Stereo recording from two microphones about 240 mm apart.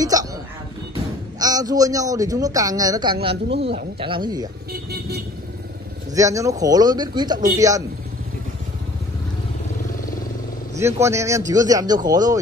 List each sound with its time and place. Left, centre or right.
0.0 s a sound: centre
1.4 s speech: centre
4.9 s vehicle: right
6.1 s speech: centre
10.8 s speech: centre